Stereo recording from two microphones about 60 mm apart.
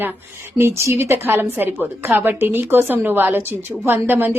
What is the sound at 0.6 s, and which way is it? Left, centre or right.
A woman's voice, right.